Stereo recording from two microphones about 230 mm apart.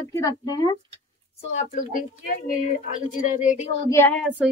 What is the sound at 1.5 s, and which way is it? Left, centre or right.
Speech, left.